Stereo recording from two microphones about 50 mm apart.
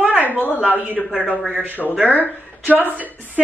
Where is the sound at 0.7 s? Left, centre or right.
Right.